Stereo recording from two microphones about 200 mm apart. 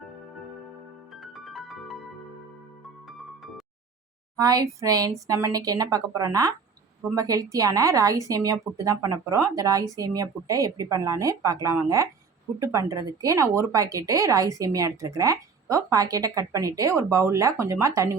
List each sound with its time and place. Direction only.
1.1 s music: centre (ahead or behind)
4.4 s speech: 15° right (ahead or behind)